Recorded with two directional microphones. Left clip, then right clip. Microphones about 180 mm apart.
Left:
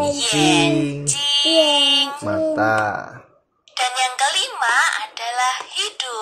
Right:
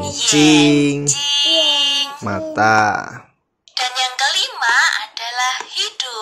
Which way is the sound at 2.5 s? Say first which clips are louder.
Right 9 dB; 40° right (ahead or behind).